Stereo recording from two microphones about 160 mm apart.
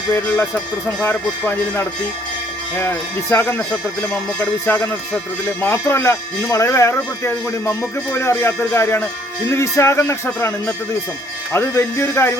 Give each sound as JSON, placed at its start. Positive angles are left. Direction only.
{"t": 1.0, "sound": "speech", "side_deg": 15}